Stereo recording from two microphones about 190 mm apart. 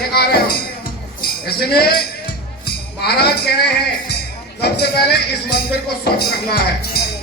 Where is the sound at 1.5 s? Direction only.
55° left (ahead or behind).